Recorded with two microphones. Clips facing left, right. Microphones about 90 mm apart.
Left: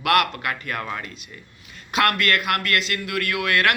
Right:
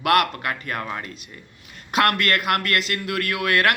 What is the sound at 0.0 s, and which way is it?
A man's voice, 35° right (ahead or behind).